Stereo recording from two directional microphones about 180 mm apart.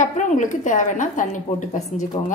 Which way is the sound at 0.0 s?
45° left (ahead or behind).